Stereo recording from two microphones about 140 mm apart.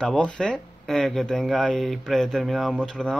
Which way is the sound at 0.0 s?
5° left (ahead or behind).